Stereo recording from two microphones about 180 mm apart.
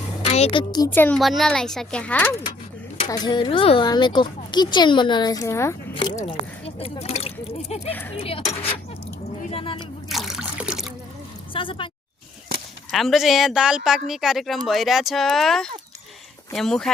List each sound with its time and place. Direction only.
0.3 s a woman's voice: 35° left (ahead or behind)
0.7 s speech: 20° left (ahead or behind)
0.9 s speech: 5° left (ahead or behind)
3.1 s speech: 25° left (ahead or behind)
5.9 s speech: 25° left (ahead or behind)
9.5 s speech: 30° left (ahead or behind)
10.1 s water: centre (ahead or behind)
11.5 s speech: 30° left (ahead or behind)
12.9 s speech: centre (ahead or behind)